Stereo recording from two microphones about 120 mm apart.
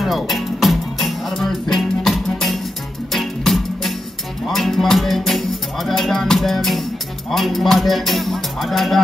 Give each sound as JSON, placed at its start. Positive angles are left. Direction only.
{"t": 0.0, "sound": "music", "side_deg": 0}